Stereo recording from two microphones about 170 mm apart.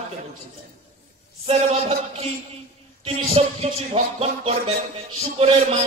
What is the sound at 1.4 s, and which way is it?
A man's voice, 35° right (ahead or behind).